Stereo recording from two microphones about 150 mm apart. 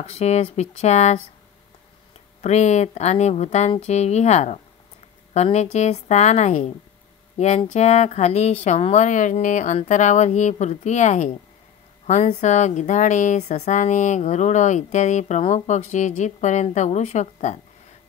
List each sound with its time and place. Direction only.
0.1 s speech: 45° left (ahead or behind)
2.4 s speech: 50° left (ahead or behind)